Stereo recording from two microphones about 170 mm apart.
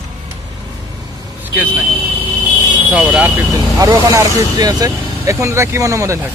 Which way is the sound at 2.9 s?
10° right (ahead or behind).